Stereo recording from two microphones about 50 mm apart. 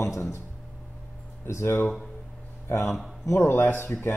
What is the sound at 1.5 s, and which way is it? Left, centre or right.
Speech, left.